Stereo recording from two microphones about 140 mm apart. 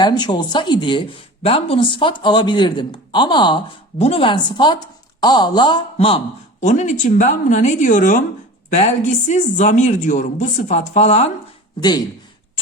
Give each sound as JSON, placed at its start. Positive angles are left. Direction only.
{"t": 0.0, "sound": "a man's voice", "side_deg": 30}
{"t": 6.6, "sound": "a woman's voice", "side_deg": 60}
{"t": 11.8, "sound": "a man's voice", "side_deg": 30}